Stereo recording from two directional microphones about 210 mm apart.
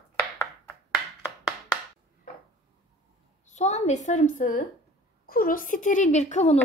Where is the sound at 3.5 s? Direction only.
35° left (ahead or behind).